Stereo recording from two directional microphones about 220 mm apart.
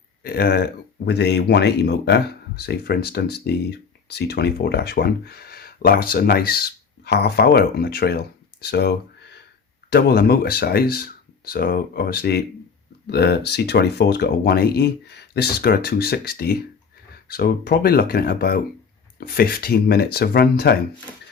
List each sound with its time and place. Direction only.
0.2 s speech: 45° left (ahead or behind)